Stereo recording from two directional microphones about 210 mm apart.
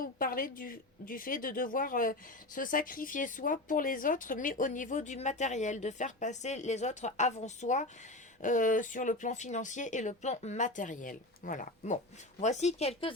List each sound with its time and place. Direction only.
0.0 s speech: 40° left (ahead or behind)